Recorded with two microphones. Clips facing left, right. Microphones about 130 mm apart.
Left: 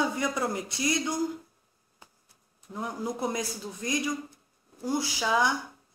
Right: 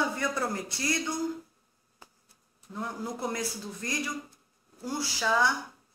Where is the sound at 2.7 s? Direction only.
15° left (ahead or behind).